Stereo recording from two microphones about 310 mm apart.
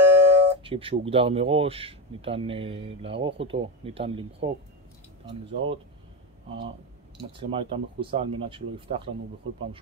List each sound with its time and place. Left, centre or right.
0.0 s speech: centre
7.3 s speech: centre